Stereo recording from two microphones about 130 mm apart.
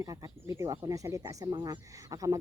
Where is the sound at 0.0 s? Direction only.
25° right (ahead or behind).